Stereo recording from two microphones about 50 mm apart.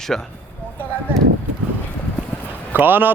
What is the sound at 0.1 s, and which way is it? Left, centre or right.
Speech, centre.